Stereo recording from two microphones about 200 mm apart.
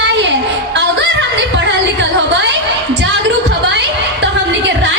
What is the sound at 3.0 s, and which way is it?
Music, 65° right (ahead or behind).